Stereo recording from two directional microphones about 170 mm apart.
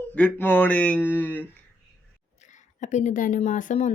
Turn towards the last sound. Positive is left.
turn(degrees=45)  # may be behind; listen again after turning